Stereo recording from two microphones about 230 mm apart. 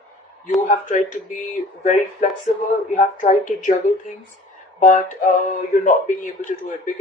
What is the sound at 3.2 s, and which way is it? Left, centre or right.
Speech, left.